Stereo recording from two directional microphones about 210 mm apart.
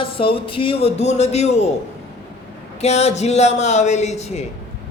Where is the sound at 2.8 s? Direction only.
30° left (ahead or behind).